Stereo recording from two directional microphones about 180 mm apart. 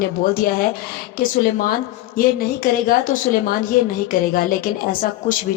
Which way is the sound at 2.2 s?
50° left (ahead or behind).